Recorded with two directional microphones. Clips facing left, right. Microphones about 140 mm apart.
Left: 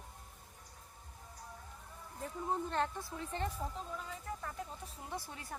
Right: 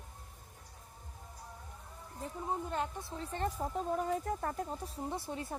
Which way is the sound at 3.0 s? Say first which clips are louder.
Right 3 dB; 35° right (ahead or behind).